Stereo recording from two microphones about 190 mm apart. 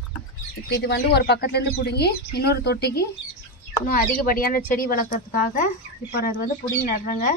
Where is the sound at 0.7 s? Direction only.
60° left (ahead or behind).